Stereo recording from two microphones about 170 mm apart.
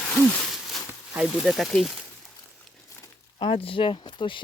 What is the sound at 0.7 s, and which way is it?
Speech, 5° right (ahead or behind).